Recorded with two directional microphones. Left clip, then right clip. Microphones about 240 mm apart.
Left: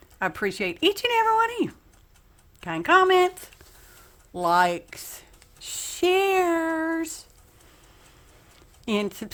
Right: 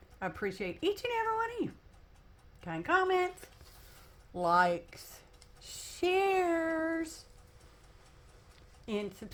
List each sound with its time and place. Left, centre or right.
0.2 s speech: left
4.4 s speech: left
8.9 s speech: left